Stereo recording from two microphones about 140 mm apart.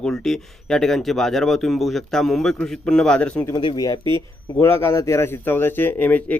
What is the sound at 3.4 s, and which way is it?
Speech, 30° left (ahead or behind).